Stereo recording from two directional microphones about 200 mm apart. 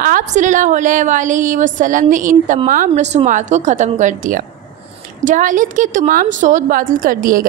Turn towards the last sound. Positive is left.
turn(degrees=-45)  # may be behind; listen again after turning